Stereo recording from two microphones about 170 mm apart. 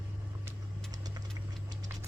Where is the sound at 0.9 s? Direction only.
20° right (ahead or behind).